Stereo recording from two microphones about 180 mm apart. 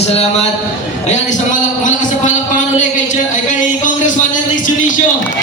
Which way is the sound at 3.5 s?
45° left (ahead or behind).